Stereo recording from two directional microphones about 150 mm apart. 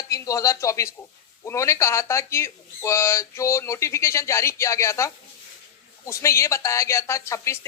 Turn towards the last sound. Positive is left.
turn(degrees=20)  # may be behind; listen again after turning